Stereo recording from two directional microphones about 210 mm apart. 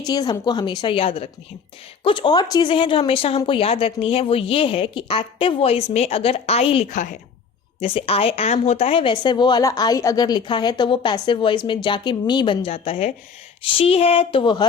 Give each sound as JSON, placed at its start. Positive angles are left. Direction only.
{"t": 0.0, "sound": "a woman's voice", "side_deg": 20}